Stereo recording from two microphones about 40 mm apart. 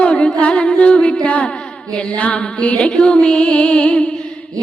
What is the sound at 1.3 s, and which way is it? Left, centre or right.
Music, left.